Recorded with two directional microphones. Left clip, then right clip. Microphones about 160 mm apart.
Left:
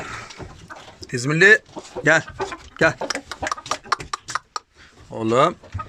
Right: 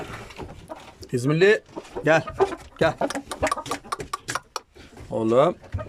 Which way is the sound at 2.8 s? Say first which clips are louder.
Left 3 dB; centre (ahead or behind).